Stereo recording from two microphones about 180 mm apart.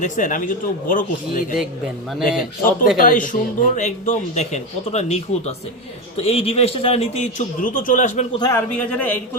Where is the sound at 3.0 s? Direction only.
45° left (ahead or behind).